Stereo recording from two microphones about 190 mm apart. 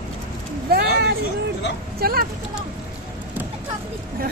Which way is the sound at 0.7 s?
55° right (ahead or behind).